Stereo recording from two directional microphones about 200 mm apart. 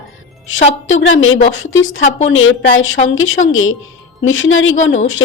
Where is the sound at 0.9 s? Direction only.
70° left (ahead or behind).